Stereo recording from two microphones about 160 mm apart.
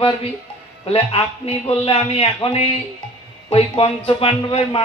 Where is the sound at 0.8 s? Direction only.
40° left (ahead or behind).